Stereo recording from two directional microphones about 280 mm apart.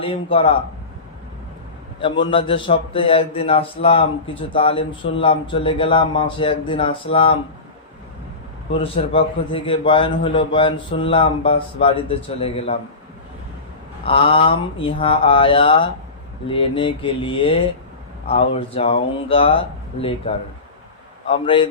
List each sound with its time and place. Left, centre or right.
0.0 s a man's voice: centre
2.0 s a man's voice: centre
8.8 s a man's voice: centre
14.0 s a man's voice: centre